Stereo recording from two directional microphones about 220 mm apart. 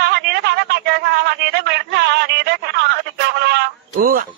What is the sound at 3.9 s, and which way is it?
Speech, 40° right (ahead or behind).